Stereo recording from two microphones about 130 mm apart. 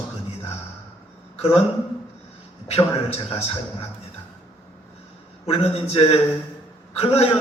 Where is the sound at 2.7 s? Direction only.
50° left (ahead or behind).